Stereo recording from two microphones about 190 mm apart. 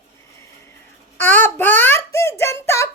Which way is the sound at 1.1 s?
10° left (ahead or behind).